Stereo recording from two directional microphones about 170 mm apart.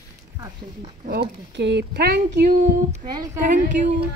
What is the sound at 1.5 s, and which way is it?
Speech, 90° right.